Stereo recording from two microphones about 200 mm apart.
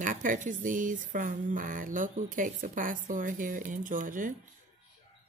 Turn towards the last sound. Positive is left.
turn(degrees=-40)  # may be behind; listen again after turning